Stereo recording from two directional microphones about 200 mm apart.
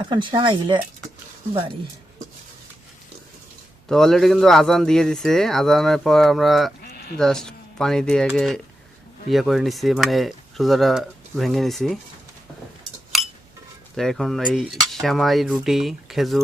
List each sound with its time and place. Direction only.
0.1 s speech: 25° right (ahead or behind)
3.8 s speech: centre (ahead or behind)
6.8 s sheep: 50° left (ahead or behind)
7.2 s speech: 5° left (ahead or behind)
13.1 s cutlery: centre (ahead or behind)
13.9 s speech: centre (ahead or behind)